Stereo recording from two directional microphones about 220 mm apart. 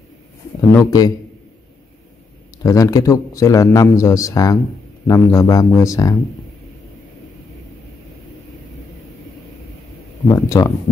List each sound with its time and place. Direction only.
0.6 s speech: 15° left (ahead or behind)
2.6 s speech: 15° left (ahead or behind)
10.3 s speech: 15° left (ahead or behind)